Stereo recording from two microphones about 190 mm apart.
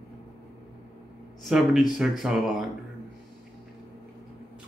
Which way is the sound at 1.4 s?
Centre (ahead or behind).